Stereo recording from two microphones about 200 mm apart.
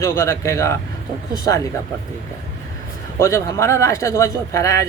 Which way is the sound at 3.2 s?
15° left (ahead or behind).